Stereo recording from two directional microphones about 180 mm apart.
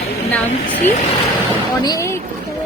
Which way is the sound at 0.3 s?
10° left (ahead or behind).